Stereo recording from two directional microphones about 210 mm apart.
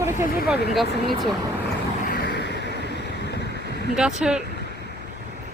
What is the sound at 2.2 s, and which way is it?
Vehicle, 50° left (ahead or behind).